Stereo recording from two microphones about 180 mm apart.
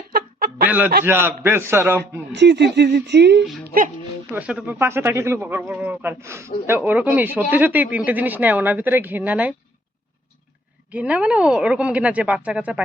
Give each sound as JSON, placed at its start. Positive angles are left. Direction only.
{"t": 0.1, "sound": "a sound", "side_deg": -55}
{"t": 1.0, "sound": "speech", "side_deg": -10}
{"t": 2.3, "sound": "speech", "side_deg": -75}
{"t": 4.3, "sound": "speech", "side_deg": -5}
{"t": 10.9, "sound": "speech", "side_deg": -5}